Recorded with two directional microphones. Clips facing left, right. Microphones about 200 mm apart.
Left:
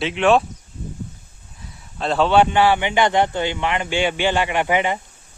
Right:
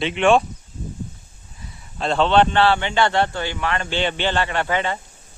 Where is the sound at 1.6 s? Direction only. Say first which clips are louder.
Even; centre (ahead or behind).